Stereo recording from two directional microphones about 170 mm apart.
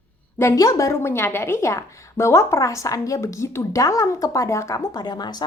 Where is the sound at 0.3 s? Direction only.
15° left (ahead or behind).